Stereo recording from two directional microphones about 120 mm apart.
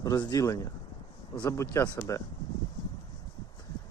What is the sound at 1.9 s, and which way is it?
Speech, 25° left (ahead or behind).